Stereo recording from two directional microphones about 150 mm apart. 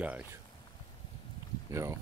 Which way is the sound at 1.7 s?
20° right (ahead or behind).